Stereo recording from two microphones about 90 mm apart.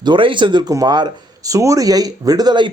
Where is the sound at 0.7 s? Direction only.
45° right (ahead or behind).